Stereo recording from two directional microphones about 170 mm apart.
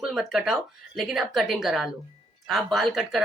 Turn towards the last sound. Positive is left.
turn(degrees=0)  # may be behind; listen again after turning